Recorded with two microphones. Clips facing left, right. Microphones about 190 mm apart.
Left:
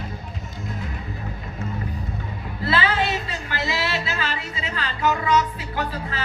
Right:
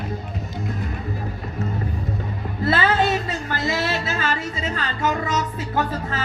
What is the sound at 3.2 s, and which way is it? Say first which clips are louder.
Music: right 3 dB; 45° right (ahead or behind).